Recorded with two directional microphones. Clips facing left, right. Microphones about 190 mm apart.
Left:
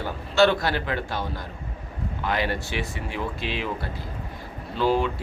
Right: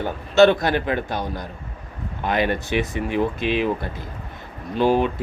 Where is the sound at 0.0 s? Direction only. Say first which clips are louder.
Right 5 dB; 20° right (ahead or behind).